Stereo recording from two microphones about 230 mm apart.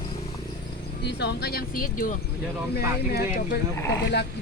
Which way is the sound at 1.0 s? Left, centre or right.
Left.